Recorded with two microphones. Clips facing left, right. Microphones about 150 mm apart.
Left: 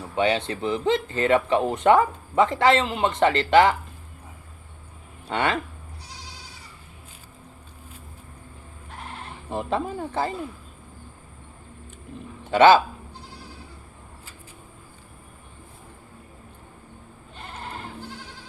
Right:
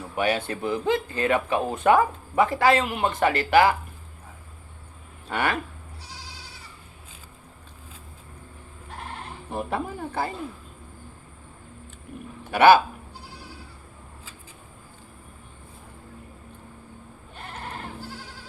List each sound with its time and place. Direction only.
0.2 s speech: 20° left (ahead or behind)
5.3 s speech: 20° left (ahead or behind)
9.6 s speech: 20° left (ahead or behind)
12.5 s speech: 20° left (ahead or behind)